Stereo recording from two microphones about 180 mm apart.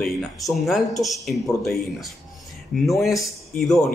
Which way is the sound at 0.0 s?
Centre (ahead or behind).